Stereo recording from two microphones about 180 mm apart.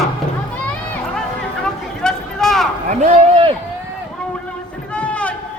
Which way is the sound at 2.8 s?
40° right (ahead or behind).